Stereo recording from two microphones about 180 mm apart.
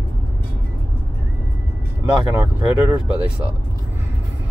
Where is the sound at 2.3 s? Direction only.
10° right (ahead or behind).